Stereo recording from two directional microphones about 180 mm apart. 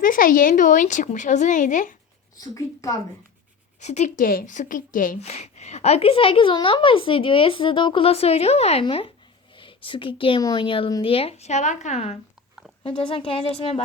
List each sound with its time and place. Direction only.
0.0 s a woman's voice: 50° left (ahead or behind)
2.4 s a woman's voice: 20° left (ahead or behind)
3.8 s a woman's voice: 40° left (ahead or behind)
4.2 s a woman's voice: 50° left (ahead or behind); by 13.8 s 35° left (ahead or behind)